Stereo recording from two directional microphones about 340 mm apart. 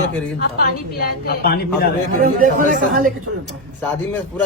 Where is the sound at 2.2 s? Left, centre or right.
Right.